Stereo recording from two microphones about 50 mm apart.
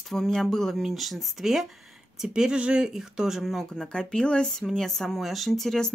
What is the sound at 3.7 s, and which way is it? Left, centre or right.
Speech, centre.